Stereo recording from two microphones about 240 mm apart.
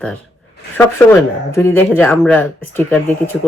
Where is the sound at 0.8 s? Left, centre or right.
Centre.